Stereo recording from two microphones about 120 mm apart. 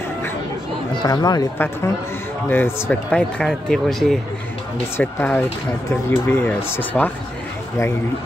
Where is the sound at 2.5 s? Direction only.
15° left (ahead or behind).